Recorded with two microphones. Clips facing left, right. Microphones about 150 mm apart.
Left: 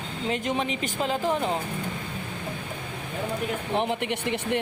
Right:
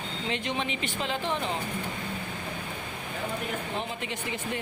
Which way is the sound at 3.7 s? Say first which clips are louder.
Left 7 dB; 65° left (ahead or behind).